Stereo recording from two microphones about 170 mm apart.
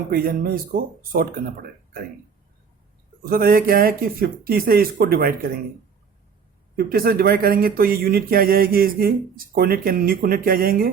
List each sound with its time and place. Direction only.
0.1 s speech: 60° right (ahead or behind)
3.2 s speech: 60° right (ahead or behind)
6.7 s speech: 60° right (ahead or behind)